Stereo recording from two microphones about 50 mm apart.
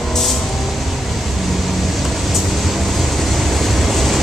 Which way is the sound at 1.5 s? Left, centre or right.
Centre.